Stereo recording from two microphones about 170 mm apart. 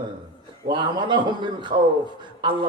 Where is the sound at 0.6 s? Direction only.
25° right (ahead or behind).